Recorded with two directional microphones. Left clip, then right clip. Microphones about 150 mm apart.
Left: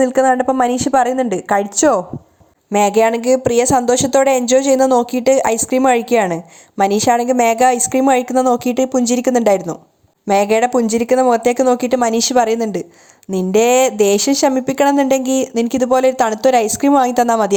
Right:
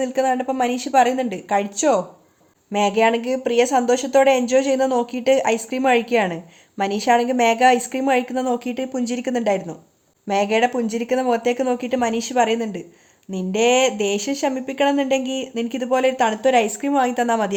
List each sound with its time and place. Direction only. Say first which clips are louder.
0.0 s speech: left 7 dB; 40° left (ahead or behind)
2.7 s speech: left 5 dB; 35° left (ahead or behind)